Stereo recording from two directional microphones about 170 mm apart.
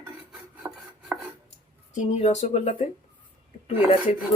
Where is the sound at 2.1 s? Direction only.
40° left (ahead or behind).